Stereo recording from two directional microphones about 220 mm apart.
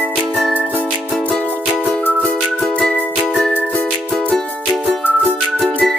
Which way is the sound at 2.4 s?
5° left (ahead or behind).